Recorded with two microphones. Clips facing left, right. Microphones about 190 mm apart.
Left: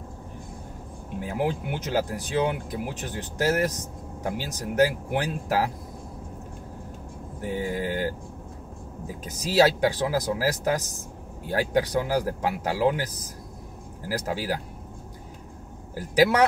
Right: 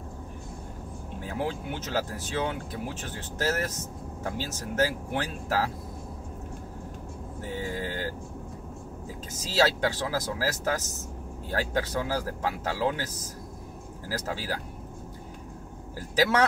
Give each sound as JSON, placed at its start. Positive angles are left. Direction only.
{"t": 1.2, "sound": "speech", "side_deg": 15}
{"t": 7.4, "sound": "speech", "side_deg": 15}
{"t": 9.6, "sound": "speech", "side_deg": 15}